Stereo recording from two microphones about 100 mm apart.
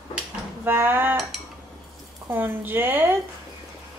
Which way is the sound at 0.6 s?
20° right (ahead or behind).